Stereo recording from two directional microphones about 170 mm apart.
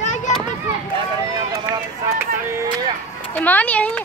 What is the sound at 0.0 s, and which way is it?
Children playing, 45° left (ahead or behind).